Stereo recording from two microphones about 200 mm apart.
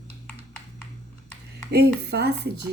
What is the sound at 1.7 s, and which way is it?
Speech, 55° right (ahead or behind).